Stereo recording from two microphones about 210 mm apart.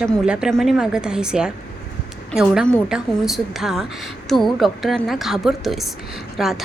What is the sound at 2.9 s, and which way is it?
A woman's voice, centre (ahead or behind).